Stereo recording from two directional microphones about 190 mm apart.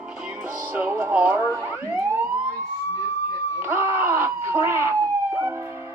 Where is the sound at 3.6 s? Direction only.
15° right (ahead or behind).